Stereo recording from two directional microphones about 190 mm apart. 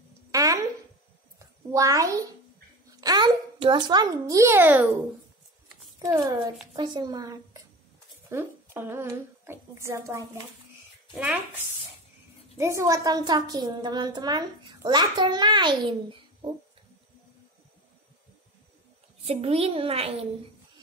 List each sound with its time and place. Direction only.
0.3 s a sound: 20° right (ahead or behind)
3.0 s a child's voice: 20° right (ahead or behind)
5.9 s a child's voice: 20° right (ahead or behind)
19.2 s a woman's voice: 35° right (ahead or behind)